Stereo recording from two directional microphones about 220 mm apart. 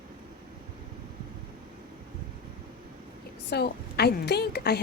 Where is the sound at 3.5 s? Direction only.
45° left (ahead or behind).